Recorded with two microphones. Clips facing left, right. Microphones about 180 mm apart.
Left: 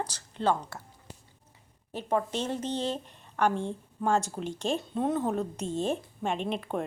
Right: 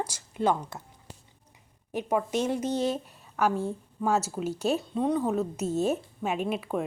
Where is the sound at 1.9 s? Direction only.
10° right (ahead or behind).